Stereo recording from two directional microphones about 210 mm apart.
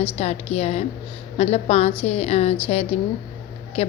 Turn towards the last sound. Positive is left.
turn(degrees=30)  # may be behind; listen again after turning